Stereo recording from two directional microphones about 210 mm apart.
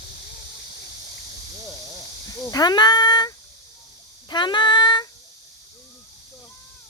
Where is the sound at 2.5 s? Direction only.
20° left (ahead or behind).